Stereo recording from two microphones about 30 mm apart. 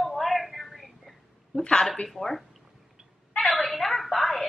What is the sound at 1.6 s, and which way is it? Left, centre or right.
Speech, left.